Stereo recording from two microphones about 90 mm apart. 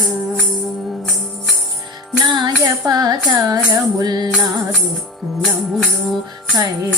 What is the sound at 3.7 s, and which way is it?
Female singing, 45° right (ahead or behind).